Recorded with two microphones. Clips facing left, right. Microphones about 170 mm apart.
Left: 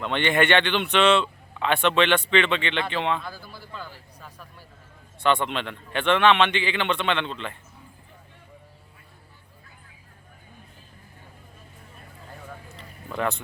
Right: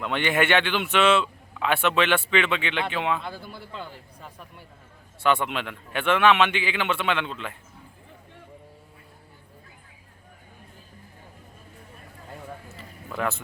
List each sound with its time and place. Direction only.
0.0 s a man's voice: 5° right (ahead or behind)
3.2 s a man's voice: 25° right (ahead or behind)
5.2 s a man's voice: 5° right (ahead or behind)
12.6 s a sound: 5° right (ahead or behind)